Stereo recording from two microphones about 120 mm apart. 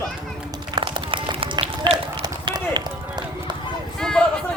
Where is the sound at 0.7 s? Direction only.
45° right (ahead or behind).